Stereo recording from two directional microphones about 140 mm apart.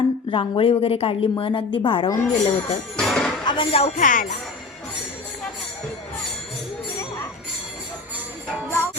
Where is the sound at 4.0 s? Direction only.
70° left (ahead or behind).